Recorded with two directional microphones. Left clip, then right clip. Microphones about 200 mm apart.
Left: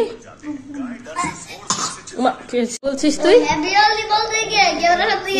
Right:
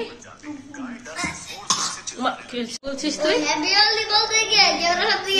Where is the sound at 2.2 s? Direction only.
30° left (ahead or behind).